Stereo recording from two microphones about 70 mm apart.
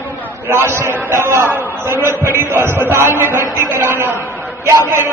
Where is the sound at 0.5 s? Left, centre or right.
Right.